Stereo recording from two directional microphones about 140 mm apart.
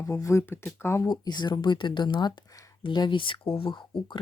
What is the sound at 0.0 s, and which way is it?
Speech, 20° left (ahead or behind).